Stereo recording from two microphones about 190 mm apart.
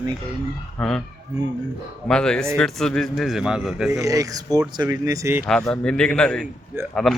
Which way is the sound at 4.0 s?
20° right (ahead or behind).